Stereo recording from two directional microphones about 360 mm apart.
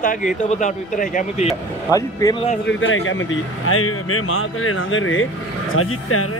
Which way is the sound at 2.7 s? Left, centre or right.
Left.